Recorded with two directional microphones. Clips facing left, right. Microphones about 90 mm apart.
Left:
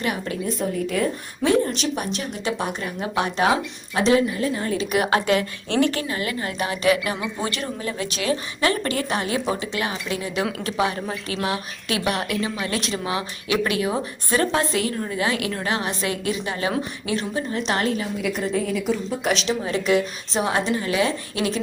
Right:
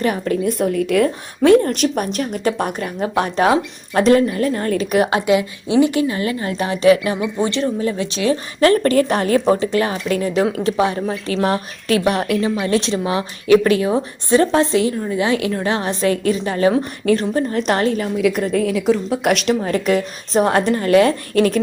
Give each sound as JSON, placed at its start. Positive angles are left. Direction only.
{"t": 0.0, "sound": "a woman's voice", "side_deg": -40}
{"t": 0.4, "sound": "a woman's voice", "side_deg": -80}
{"t": 1.4, "sound": "a woman's voice", "side_deg": -55}
{"t": 3.9, "sound": "speech", "side_deg": -50}
{"t": 5.2, "sound": "speech", "side_deg": -10}
{"t": 6.0, "sound": "a woman's voice", "side_deg": -30}
{"t": 8.6, "sound": "speech", "side_deg": -45}
{"t": 10.4, "sound": "a woman's voice", "side_deg": -30}
{"t": 11.4, "sound": "a woman's voice", "side_deg": -40}
{"t": 18.3, "sound": "a woman's voice", "side_deg": -80}
{"t": 19.3, "sound": "speech", "side_deg": -55}